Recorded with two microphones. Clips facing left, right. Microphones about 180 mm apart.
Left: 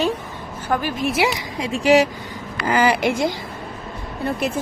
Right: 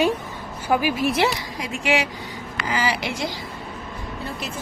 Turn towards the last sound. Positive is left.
turn(degrees=60)  # may be behind; listen again after turning